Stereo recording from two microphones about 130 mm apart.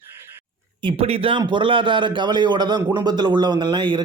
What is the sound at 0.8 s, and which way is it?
A man's voice, 40° right (ahead or behind).